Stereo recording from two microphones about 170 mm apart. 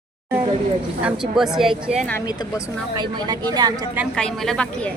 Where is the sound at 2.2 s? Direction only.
25° left (ahead or behind).